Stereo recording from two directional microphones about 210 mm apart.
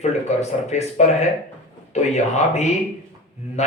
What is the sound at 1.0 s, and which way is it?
Speech, 30° left (ahead or behind).